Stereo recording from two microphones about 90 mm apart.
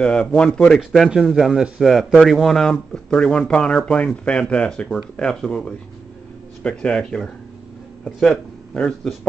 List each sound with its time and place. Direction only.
0.0 s speech: 10° left (ahead or behind)
0.7 s speech: centre (ahead or behind)